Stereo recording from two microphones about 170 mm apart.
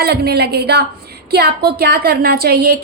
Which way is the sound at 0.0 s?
75° right (ahead or behind).